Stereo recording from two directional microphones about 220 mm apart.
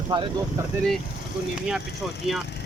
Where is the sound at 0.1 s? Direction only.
20° right (ahead or behind).